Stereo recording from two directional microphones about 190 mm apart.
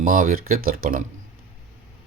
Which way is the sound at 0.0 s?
45° right (ahead or behind).